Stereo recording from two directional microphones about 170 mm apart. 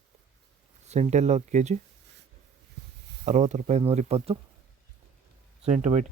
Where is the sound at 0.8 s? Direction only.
40° right (ahead or behind).